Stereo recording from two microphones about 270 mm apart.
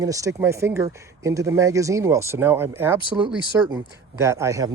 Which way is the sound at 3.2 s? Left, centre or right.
Centre.